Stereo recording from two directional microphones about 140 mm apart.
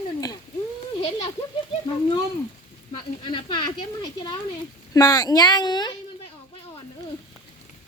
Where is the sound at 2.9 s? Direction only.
35° left (ahead or behind).